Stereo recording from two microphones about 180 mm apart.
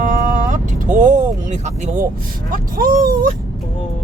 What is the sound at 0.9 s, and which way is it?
Speech, 45° right (ahead or behind).